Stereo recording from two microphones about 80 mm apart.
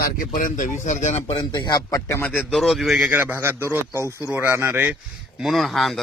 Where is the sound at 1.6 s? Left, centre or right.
Left.